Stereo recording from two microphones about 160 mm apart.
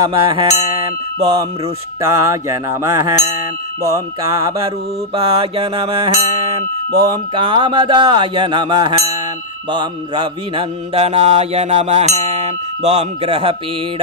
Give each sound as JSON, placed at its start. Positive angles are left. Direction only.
{"t": 0.1, "sound": "mantra", "side_deg": -35}
{"t": 2.0, "sound": "speech", "side_deg": -20}
{"t": 4.6, "sound": "mantra", "side_deg": -40}
{"t": 7.0, "sound": "speech", "side_deg": -30}
{"t": 9.7, "sound": "mantra", "side_deg": -30}